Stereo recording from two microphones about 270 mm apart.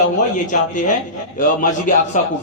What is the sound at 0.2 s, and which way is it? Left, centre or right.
Speech, left.